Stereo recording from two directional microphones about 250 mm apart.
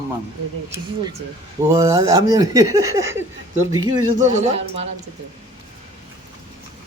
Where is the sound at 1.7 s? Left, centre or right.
Centre.